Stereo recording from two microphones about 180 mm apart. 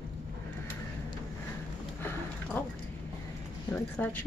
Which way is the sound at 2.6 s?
10° left (ahead or behind).